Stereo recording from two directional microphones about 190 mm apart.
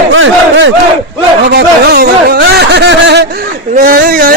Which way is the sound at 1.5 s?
60° right (ahead or behind).